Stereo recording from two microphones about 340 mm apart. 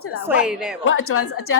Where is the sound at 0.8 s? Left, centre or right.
Left.